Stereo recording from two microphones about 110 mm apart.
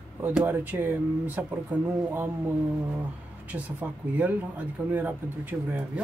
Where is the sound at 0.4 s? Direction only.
20° right (ahead or behind).